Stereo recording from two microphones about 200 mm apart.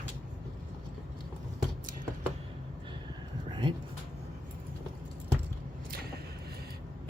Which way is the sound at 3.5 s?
25° right (ahead or behind).